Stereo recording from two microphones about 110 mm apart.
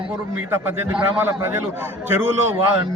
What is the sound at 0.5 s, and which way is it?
Speech, 20° right (ahead or behind).